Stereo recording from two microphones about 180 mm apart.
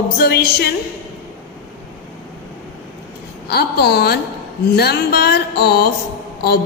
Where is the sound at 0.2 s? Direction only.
60° left (ahead or behind).